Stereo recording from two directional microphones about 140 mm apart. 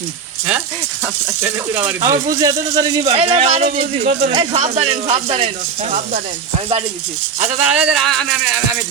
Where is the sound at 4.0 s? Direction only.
90° right.